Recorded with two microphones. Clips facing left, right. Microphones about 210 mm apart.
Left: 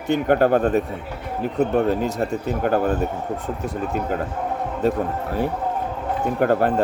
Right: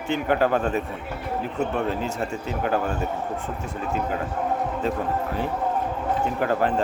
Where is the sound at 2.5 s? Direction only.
50° left (ahead or behind).